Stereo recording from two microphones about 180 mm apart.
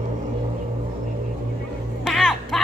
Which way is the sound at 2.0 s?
Centre (ahead or behind).